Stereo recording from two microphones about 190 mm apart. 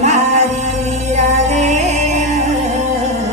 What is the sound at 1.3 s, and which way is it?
Music, 35° right (ahead or behind).